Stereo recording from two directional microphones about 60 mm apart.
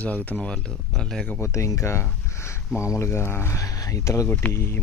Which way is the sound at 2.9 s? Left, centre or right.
Left.